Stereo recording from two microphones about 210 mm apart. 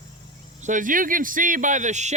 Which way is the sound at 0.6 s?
40° right (ahead or behind).